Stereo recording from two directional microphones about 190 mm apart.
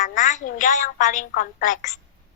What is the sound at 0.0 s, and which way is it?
A woman's voice, 40° left (ahead or behind).